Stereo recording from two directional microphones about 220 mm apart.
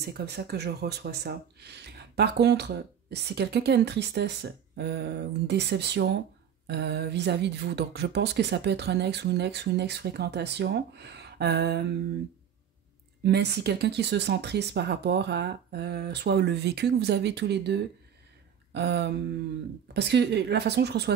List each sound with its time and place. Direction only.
0.0 s speech: 45° right (ahead or behind)
13.2 s speech: 50° right (ahead or behind)